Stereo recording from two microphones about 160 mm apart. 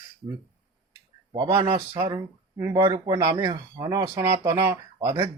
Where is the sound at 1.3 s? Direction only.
20° right (ahead or behind).